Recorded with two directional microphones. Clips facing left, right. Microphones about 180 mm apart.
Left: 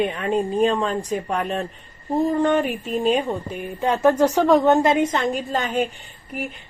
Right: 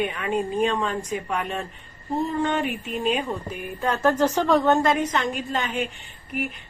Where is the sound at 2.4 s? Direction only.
45° left (ahead or behind).